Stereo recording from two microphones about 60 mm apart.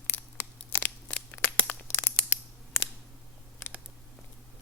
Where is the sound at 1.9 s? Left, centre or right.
Left.